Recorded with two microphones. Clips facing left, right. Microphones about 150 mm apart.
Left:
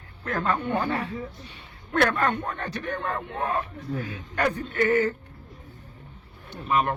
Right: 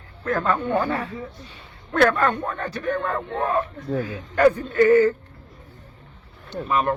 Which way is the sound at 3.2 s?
30° right (ahead or behind).